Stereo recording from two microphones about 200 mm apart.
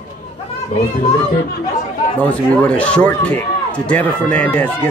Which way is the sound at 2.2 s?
5° left (ahead or behind).